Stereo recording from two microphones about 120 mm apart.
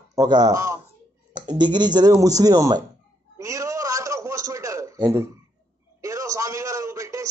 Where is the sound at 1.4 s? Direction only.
40° right (ahead or behind).